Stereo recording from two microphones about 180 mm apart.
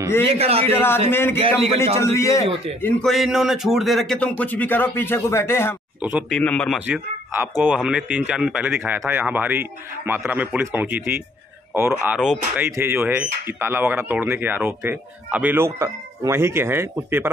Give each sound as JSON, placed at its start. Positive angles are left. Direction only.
{"t": 0.3, "sound": "a man's voice", "side_deg": -35}
{"t": 0.7, "sound": "speech", "side_deg": 10}
{"t": 1.4, "sound": "a man's voice", "side_deg": -30}
{"t": 2.0, "sound": "speech", "side_deg": 15}
{"t": 2.8, "sound": "a man's voice", "side_deg": 0}
{"t": 6.9, "sound": "speech", "side_deg": -10}